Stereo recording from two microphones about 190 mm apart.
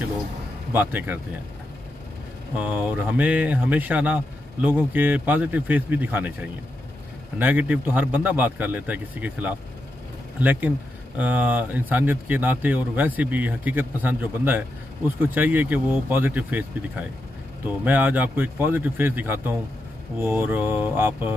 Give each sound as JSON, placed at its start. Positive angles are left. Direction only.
{"t": 0.7, "sound": "speech", "side_deg": -10}
{"t": 2.5, "sound": "speech", "side_deg": -5}
{"t": 7.3, "sound": "speech", "side_deg": -10}